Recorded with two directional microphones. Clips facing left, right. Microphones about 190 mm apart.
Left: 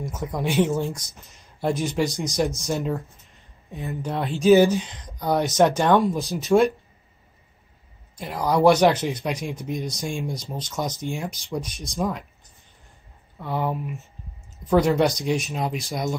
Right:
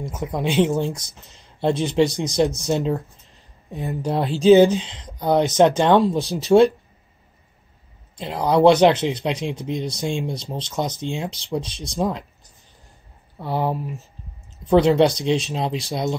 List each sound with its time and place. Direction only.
0.1 s speech: 20° right (ahead or behind)
2.7 s speech: 20° right (ahead or behind)
3.3 s speech: 35° right (ahead or behind)
4.5 s speech: 20° right (ahead or behind)
8.2 s speech: 25° right (ahead or behind)
13.4 s speech: 30° right (ahead or behind)